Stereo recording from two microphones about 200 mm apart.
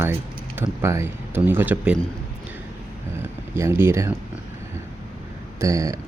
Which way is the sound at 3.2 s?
10° right (ahead or behind).